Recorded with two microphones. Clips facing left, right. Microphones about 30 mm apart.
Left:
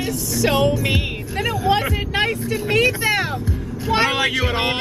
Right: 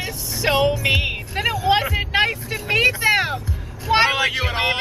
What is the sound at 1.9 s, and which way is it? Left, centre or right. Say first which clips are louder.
Vehicle: right 1 dB; centre.